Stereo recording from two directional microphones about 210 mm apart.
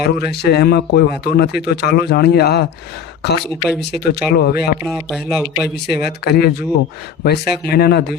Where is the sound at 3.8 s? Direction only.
50° left (ahead or behind).